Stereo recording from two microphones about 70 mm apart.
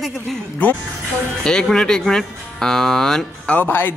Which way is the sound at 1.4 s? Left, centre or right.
Centre.